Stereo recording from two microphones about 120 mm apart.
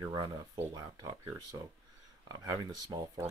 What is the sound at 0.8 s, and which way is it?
Speech, 25° right (ahead or behind).